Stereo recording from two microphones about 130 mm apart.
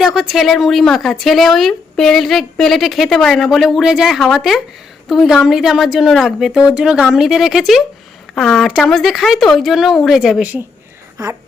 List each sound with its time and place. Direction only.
0.0 s speech: centre (ahead or behind)